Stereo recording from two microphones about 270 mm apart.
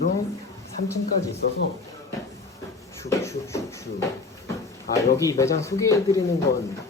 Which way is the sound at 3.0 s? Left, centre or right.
Centre.